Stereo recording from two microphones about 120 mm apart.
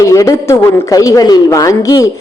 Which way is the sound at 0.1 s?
25° left (ahead or behind).